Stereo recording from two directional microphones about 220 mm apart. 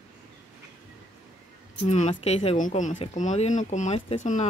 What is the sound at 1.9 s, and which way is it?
Speech, 30° left (ahead or behind).